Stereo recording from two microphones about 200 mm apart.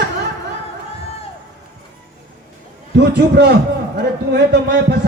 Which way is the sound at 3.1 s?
55° right (ahead or behind).